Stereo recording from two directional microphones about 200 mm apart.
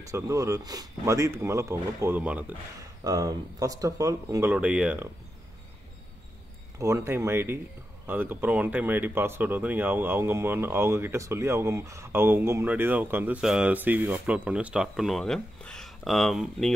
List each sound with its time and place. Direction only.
0.1 s speech: 15° right (ahead or behind)
6.8 s speech: 15° right (ahead or behind)